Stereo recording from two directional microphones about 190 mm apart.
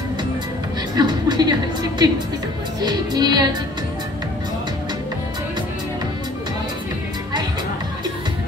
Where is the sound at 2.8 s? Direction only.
20° right (ahead or behind).